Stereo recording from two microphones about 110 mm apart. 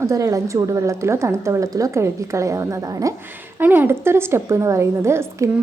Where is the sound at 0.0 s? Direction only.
30° right (ahead or behind).